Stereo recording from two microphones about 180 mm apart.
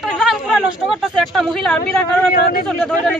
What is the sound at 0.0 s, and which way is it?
Speech, centre (ahead or behind).